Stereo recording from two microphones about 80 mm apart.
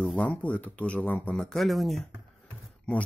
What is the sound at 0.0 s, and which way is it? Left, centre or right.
Speech, centre.